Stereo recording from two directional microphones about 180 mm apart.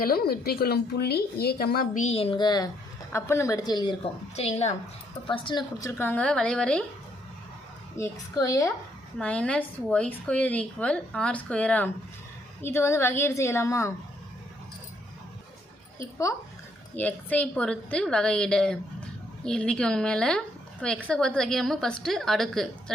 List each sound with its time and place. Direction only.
0.0 s a woman's voice: 60° left (ahead or behind); by 3.9 s 25° left (ahead or behind)
4.4 s a woman's voice: 35° left (ahead or behind)
6.0 s a woman's voice: 10° left (ahead or behind)
7.9 s a woman's voice: 15° left (ahead or behind)
9.1 s a woman's voice: 5° left (ahead or behind)
16.0 s a woman's voice: 15° left (ahead or behind); by 22.7 s centre (ahead or behind)